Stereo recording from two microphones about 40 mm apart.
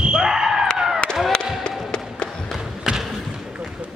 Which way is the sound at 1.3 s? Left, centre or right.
Left.